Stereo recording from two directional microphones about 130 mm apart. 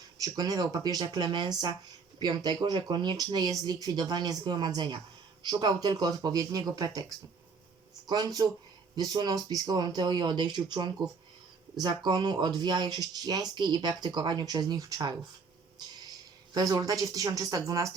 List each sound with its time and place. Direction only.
0.2 s speech: 30° right (ahead or behind)
16.6 s speech: 30° right (ahead or behind)